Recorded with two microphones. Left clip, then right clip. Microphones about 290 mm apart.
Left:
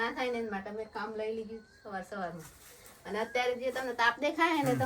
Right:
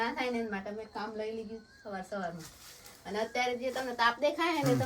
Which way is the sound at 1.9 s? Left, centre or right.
Centre.